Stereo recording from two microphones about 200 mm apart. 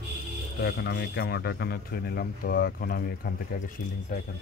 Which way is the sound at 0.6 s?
55° left (ahead or behind).